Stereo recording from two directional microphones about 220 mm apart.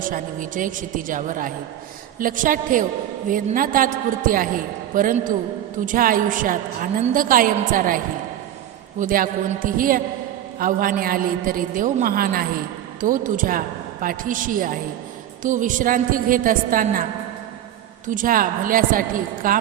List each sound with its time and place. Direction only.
0.0 s a man's voice: 35° right (ahead or behind)